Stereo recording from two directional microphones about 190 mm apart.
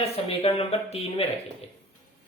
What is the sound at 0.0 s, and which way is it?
Speech, 30° left (ahead or behind).